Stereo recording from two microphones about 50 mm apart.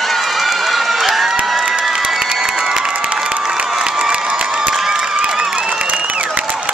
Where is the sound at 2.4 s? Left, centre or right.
Centre.